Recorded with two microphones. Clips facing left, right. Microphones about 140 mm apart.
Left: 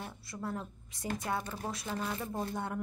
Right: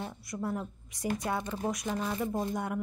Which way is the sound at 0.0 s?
20° right (ahead or behind).